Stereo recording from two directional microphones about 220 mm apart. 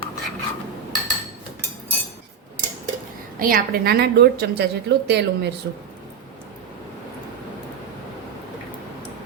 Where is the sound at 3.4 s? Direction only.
40° right (ahead or behind).